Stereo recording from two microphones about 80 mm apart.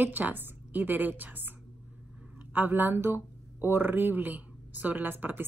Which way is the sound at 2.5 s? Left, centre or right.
Right.